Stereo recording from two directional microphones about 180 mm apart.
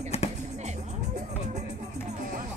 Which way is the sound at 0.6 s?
40° right (ahead or behind).